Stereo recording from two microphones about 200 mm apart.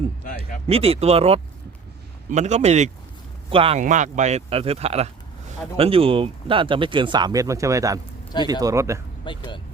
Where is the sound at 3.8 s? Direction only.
40° right (ahead or behind); by 9.0 s 15° right (ahead or behind).